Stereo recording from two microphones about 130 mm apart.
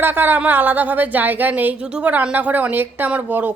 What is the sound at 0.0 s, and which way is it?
A woman's voice, 15° right (ahead or behind).